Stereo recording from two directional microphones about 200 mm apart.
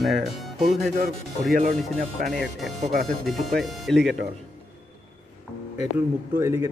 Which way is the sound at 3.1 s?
Centre (ahead or behind).